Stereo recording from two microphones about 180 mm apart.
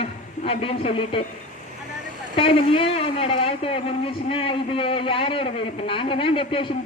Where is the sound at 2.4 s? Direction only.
30° left (ahead or behind).